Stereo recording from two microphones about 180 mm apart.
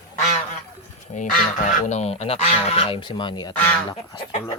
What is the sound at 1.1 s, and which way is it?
Speech, 45° left (ahead or behind).